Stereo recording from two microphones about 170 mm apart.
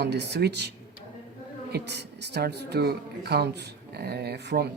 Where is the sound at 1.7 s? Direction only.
80° right.